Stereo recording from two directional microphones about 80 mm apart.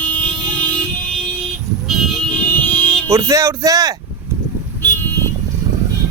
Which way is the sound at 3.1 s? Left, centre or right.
Right.